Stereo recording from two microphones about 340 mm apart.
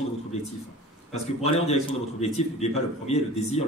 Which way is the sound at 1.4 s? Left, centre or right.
Centre.